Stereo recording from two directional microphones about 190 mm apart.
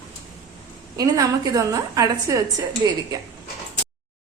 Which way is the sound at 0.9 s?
20° right (ahead or behind).